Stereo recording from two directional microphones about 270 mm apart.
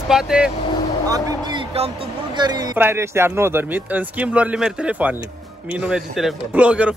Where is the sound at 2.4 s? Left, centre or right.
Centre.